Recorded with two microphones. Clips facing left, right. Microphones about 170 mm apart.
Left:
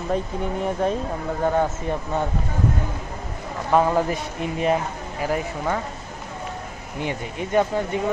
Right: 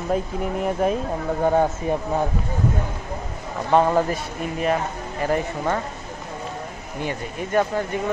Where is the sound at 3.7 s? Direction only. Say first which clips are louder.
Right 1 dB; centre (ahead or behind).